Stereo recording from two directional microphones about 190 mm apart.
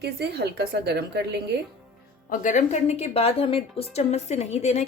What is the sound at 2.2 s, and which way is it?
A woman's voice, 45° left (ahead or behind).